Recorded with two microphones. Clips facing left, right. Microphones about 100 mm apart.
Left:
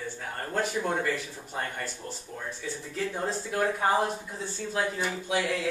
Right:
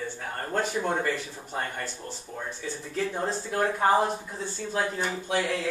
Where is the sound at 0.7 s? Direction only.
20° right (ahead or behind).